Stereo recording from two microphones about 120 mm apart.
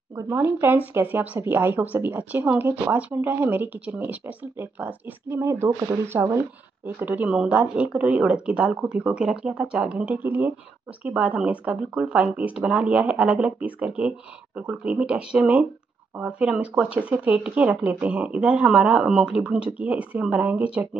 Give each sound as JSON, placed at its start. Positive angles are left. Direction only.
{"t": 0.1, "sound": "speech", "side_deg": -20}